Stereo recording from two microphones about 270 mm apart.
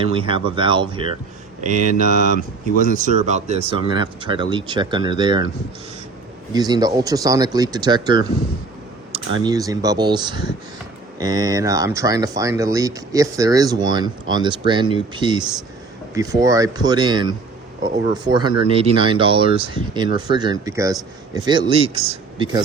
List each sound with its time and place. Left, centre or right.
0.0 s speech: centre
6.5 s speech: centre
9.4 s speech: centre